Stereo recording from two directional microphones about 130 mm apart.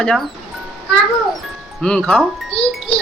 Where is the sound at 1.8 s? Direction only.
10° left (ahead or behind).